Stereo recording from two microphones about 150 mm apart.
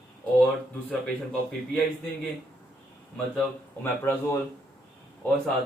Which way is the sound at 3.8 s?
15° left (ahead or behind).